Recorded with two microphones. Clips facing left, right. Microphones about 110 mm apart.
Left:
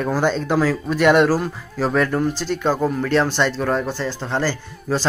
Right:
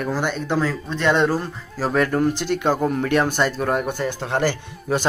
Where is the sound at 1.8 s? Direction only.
10° right (ahead or behind).